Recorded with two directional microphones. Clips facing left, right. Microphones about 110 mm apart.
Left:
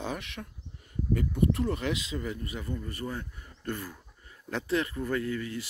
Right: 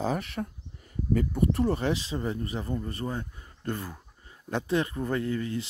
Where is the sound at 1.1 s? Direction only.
40° right (ahead or behind).